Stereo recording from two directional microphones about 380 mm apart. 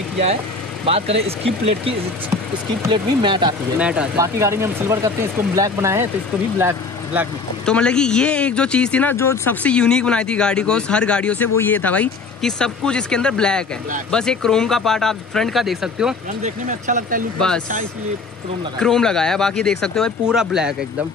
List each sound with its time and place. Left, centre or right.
0.8 s speech: centre
2.9 s speech: centre
7.2 s speech: centre
16.4 s speech: centre
18.8 s speech: centre